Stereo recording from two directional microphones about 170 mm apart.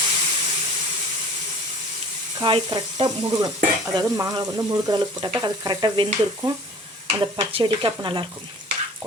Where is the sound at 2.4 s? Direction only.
25° right (ahead or behind).